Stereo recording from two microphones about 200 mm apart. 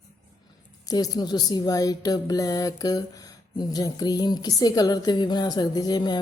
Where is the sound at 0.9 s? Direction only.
20° left (ahead or behind).